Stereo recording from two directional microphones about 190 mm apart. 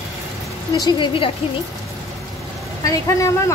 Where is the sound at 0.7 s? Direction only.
25° left (ahead or behind).